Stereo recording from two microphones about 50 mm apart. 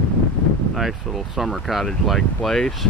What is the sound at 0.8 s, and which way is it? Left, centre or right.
Speech, centre.